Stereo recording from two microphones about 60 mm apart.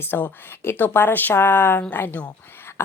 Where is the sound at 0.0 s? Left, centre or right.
Left.